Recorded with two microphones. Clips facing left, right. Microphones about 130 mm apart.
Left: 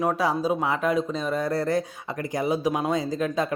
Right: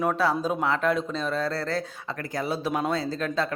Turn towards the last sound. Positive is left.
turn(degrees=15)  # may be behind; listen again after turning